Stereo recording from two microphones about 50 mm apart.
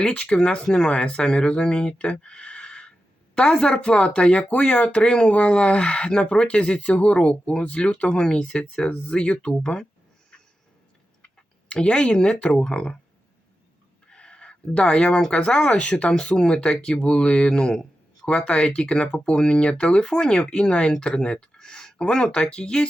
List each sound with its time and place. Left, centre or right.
0.1 s speech: left
11.7 s speech: left
14.1 s a sound: centre
15.4 s speech: left